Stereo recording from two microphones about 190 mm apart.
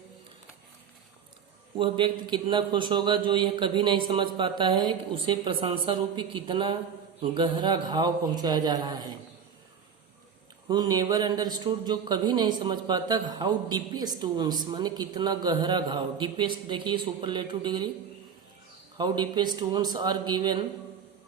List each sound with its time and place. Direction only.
1.8 s speech: 25° right (ahead or behind)
10.7 s speech: 20° right (ahead or behind)
18.9 s speech: 25° right (ahead or behind)